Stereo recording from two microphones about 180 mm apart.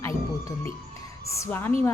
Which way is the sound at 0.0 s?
15° left (ahead or behind).